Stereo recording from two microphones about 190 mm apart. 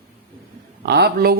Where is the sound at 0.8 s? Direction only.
60° right (ahead or behind).